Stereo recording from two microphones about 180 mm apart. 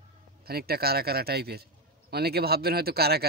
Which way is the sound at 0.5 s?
60° right (ahead or behind).